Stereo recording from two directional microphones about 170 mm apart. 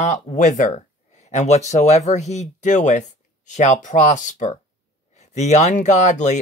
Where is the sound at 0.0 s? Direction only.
45° left (ahead or behind).